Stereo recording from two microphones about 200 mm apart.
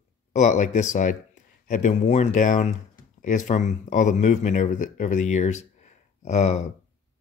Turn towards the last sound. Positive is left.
turn(degrees=35)  # may be behind; listen again after turning